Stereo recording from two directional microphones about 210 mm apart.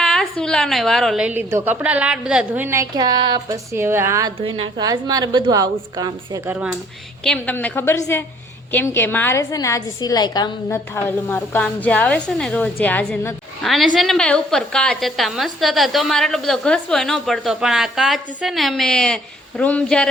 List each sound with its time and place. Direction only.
0.0 s a woman's voice: centre (ahead or behind)
4.4 s a woman's voice: 25° right (ahead or behind); by 6.7 s 5° right (ahead or behind)
7.3 s a woman's voice: 10° left (ahead or behind)